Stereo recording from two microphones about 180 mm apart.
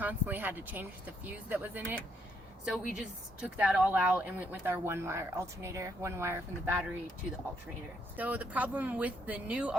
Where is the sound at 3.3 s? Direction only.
10° right (ahead or behind).